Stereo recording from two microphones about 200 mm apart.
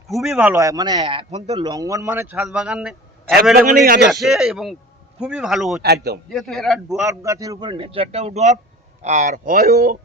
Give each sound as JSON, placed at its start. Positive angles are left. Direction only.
{"t": 0.1, "sound": "a man's voice", "side_deg": 0}
{"t": 0.5, "sound": "speech", "side_deg": -15}
{"t": 1.6, "sound": "a man's voice", "side_deg": -15}
{"t": 3.7, "sound": "speech", "side_deg": -45}
{"t": 4.1, "sound": "a man's voice", "side_deg": 0}
{"t": 5.8, "sound": "speech", "side_deg": -55}
{"t": 6.3, "sound": "a man's voice", "side_deg": 0}
{"t": 7.1, "sound": "speech", "side_deg": -15}